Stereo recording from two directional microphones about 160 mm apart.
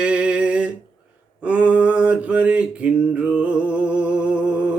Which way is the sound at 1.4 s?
10° right (ahead or behind).